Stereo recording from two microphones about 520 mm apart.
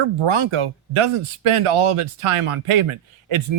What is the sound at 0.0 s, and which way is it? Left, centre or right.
Speech, right.